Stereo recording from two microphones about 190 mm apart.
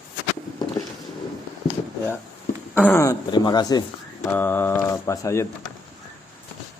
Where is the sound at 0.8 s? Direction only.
15° left (ahead or behind).